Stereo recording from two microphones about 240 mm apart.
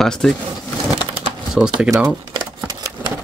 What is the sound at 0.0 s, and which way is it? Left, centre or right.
Speech, centre.